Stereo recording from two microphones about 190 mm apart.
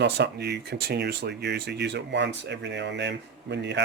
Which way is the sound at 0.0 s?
65° right (ahead or behind).